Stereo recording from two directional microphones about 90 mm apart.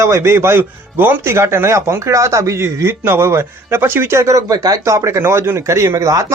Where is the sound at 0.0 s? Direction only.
30° right (ahead or behind).